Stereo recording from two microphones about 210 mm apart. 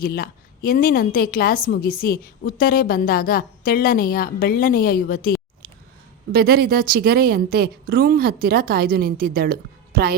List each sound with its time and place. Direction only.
0.0 s a woman's voice: 45° left (ahead or behind)
6.3 s a woman's voice: 45° right (ahead or behind)